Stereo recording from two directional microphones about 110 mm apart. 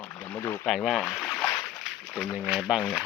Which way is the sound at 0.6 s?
Centre (ahead or behind).